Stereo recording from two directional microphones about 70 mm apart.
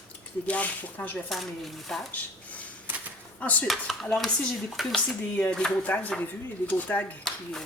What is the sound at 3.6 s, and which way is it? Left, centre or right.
Speech, centre.